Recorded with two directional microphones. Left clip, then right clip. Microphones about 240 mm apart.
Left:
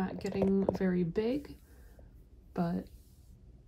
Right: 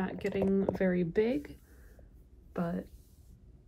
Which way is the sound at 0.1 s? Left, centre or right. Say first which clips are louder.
Right 1 dB; right.